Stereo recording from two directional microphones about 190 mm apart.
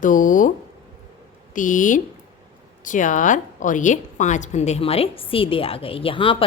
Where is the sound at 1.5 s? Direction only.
45° left (ahead or behind).